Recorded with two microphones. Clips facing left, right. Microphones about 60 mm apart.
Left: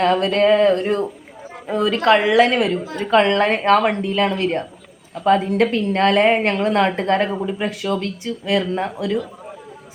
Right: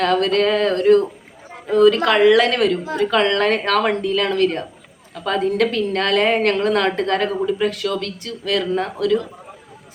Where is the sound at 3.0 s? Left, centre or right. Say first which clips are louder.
Left 2 dB; left.